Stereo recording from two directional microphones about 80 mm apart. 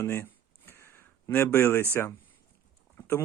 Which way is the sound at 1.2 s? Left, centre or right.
Left.